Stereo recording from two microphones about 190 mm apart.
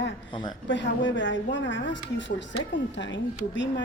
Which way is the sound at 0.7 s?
70° left (ahead or behind).